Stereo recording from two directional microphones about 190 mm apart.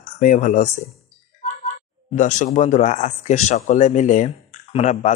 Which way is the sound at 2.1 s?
40° left (ahead or behind).